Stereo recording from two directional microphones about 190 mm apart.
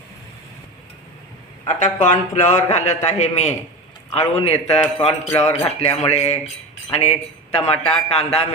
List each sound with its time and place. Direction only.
1.6 s a man's voice: 40° left (ahead or behind)